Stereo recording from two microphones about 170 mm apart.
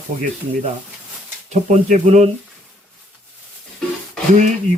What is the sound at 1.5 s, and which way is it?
Speech, 45° right (ahead or behind).